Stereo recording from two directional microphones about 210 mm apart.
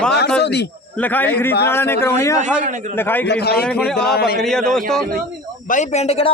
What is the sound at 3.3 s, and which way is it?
Speech, 50° left (ahead or behind).